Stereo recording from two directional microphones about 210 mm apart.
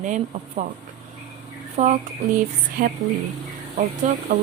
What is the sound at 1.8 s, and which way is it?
A woman's voice, 35° right (ahead or behind).